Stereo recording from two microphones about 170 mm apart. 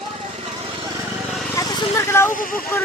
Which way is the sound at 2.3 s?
55° left (ahead or behind).